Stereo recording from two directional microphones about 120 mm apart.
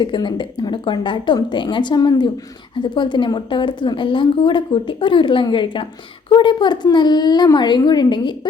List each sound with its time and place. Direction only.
0.0 s a woman's voice: 40° left (ahead or behind)